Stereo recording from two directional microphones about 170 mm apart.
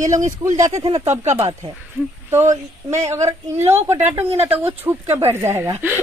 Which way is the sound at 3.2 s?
40° right (ahead or behind).